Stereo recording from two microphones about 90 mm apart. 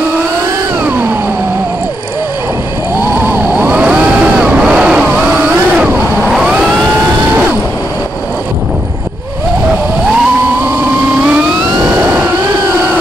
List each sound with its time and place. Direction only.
3.2 s vehicle: 20° right (ahead or behind)
11.9 s vehicle: 20° right (ahead or behind)